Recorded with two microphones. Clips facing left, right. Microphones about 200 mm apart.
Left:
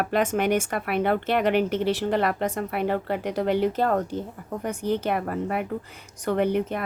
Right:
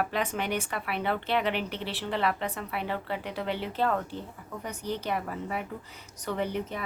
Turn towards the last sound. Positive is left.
turn(degrees=60)  # may be behind; listen again after turning